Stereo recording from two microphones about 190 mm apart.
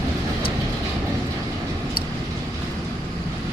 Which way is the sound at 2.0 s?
55° left (ahead or behind).